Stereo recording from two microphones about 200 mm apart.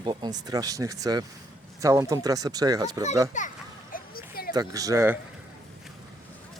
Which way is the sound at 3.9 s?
50° left (ahead or behind).